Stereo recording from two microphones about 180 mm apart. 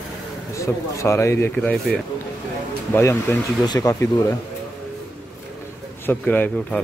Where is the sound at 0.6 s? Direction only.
15° left (ahead or behind).